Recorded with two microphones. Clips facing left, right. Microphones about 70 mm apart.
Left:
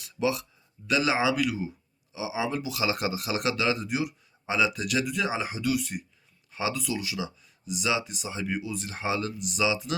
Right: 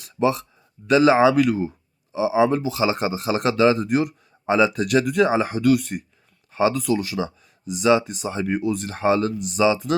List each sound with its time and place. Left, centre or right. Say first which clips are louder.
0.0 s a sound: right 7 dB; right
0.9 s speech: right 10 dB; right
6.5 s speech: right 10 dB; right